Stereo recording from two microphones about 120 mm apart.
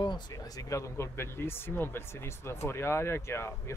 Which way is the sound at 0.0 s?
35° left (ahead or behind).